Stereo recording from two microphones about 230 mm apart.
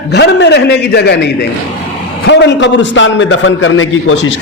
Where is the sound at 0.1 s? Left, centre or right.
Left.